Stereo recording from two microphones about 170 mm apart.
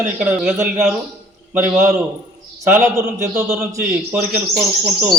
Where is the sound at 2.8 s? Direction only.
15° right (ahead or behind).